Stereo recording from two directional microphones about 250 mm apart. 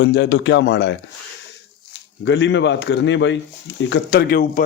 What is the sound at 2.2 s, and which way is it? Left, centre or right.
Speech, left.